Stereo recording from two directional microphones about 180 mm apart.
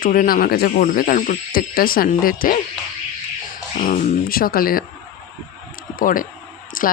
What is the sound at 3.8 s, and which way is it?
Speech, 45° left (ahead or behind).